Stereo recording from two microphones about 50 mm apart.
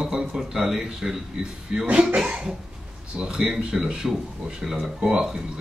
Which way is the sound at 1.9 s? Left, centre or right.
Right.